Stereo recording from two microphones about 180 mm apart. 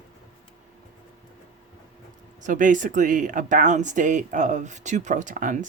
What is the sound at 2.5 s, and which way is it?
Speech, 45° right (ahead or behind).